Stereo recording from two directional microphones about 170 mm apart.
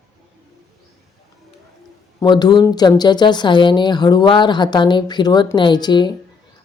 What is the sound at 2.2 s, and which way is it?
A woman's voice, 25° left (ahead or behind).